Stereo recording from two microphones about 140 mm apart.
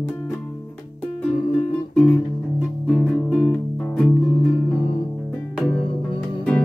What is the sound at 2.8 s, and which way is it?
Music, 5° left (ahead or behind).